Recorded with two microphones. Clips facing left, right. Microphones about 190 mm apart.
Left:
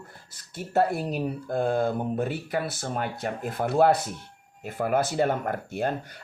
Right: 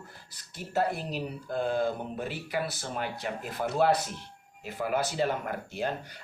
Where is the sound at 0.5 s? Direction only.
50° left (ahead or behind).